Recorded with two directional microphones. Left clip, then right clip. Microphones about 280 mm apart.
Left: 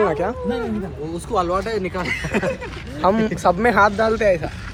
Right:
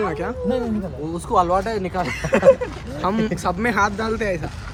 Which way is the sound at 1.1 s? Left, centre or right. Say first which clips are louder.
Right 3 dB; right.